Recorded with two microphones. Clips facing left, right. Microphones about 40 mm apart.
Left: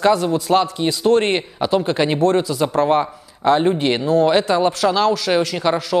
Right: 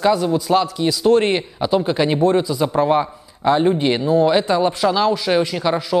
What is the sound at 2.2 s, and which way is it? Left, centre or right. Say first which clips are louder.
Speech: even; left.